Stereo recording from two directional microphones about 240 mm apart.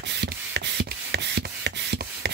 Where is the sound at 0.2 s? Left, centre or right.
Right.